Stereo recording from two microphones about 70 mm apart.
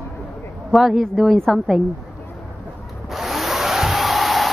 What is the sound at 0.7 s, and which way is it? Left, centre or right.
A woman's voice, centre.